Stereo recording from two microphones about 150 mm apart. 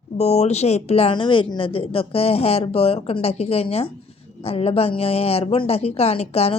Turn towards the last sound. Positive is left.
turn(degrees=40)  # may be behind; listen again after turning